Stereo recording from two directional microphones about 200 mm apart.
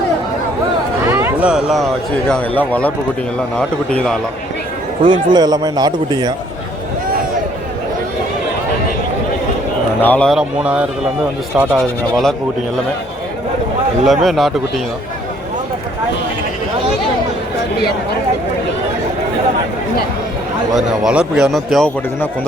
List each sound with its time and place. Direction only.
1.0 s a sound: 10° right (ahead or behind)
2.3 s a man's voice: 5° left (ahead or behind)
5.0 s a man's voice: 20° right (ahead or behind)
10.0 s a man's voice: 5° left (ahead or behind)
14.0 s a man's voice: centre (ahead or behind)
20.7 s a man's voice: 5° right (ahead or behind)